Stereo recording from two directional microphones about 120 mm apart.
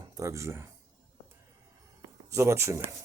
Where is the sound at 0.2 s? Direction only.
25° right (ahead or behind).